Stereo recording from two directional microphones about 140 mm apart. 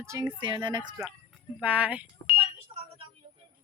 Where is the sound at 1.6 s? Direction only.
10° right (ahead or behind).